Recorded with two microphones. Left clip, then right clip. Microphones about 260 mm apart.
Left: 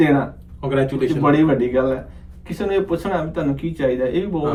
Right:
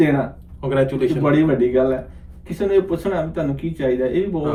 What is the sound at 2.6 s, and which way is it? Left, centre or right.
Speech, left.